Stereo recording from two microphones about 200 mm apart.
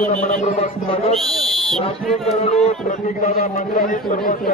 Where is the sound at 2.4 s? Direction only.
30° left (ahead or behind).